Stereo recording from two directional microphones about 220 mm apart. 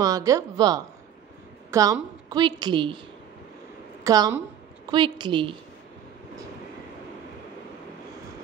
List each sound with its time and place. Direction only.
0.0 s a woman's voice: 15° right (ahead or behind)
4.0 s a woman's voice: 15° right (ahead or behind)